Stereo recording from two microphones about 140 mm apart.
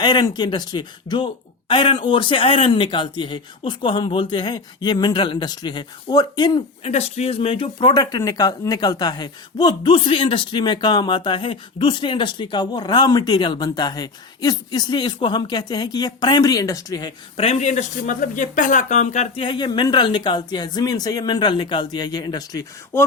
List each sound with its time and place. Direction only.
0.0 s speech: 30° left (ahead or behind)
6.8 s speech: 50° left (ahead or behind); by 17.1 s 25° left (ahead or behind)
17.3 s speech: 45° left (ahead or behind)
19.4 s speech: 35° left (ahead or behind)